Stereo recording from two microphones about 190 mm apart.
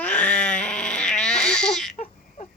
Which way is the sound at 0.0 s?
5° left (ahead or behind).